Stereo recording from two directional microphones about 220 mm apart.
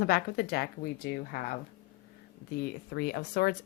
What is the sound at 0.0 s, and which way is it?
A woman's voice, 45° left (ahead or behind).